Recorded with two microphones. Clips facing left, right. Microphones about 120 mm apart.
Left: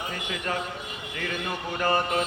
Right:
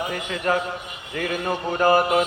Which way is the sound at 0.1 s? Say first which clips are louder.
Right 7 dB; 40° right (ahead or behind).